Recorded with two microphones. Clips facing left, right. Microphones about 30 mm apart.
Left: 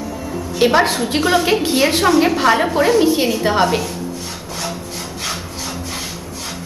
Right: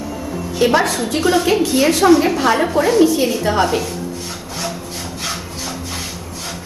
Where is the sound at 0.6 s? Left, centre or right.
Left.